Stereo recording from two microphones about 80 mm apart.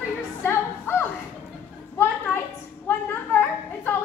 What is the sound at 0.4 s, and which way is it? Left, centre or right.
Music, left.